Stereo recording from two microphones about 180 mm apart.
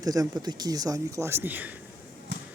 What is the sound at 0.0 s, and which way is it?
Speech, 20° right (ahead or behind).